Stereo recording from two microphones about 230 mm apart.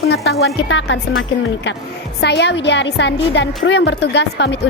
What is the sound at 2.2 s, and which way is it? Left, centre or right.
A woman's voice, left.